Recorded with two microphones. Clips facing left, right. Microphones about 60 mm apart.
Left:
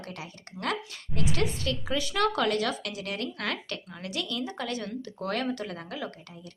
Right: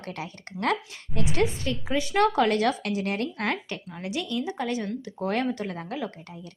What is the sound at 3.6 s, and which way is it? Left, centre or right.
Speech, centre.